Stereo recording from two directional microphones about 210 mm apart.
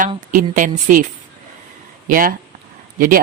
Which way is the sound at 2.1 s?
40° right (ahead or behind).